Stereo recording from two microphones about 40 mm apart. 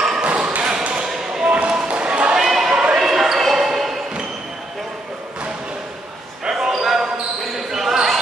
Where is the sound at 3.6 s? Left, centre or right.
Centre.